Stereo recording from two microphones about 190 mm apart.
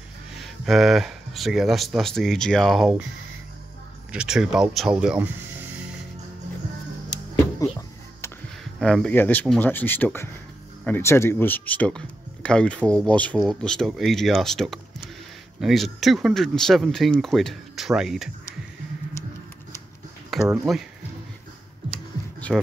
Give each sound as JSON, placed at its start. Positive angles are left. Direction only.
{"t": 0.4, "sound": "speech", "side_deg": 0}
{"t": 4.1, "sound": "speech", "side_deg": -5}
{"t": 8.7, "sound": "speech", "side_deg": 5}
{"t": 20.3, "sound": "a sound", "side_deg": 0}
{"t": 20.7, "sound": "speech", "side_deg": 0}
{"t": 21.9, "sound": "computer keyboard", "side_deg": 0}